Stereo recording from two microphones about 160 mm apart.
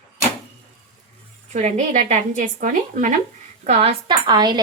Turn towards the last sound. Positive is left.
turn(degrees=-25)  # may be behind; listen again after turning